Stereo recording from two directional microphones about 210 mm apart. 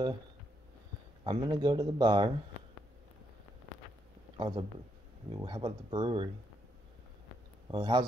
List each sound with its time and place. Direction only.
1.2 s speech: 20° right (ahead or behind)
4.4 s speech: 20° right (ahead or behind)
7.7 s speech: 20° right (ahead or behind)